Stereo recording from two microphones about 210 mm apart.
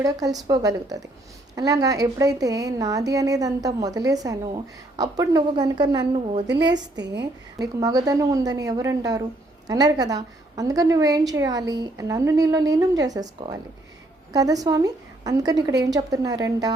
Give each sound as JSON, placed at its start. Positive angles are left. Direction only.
{"t": 0.0, "sound": "a woman's voice", "side_deg": -15}
{"t": 6.9, "sound": "a woman's voice", "side_deg": -55}
{"t": 7.6, "sound": "a woman's voice", "side_deg": -20}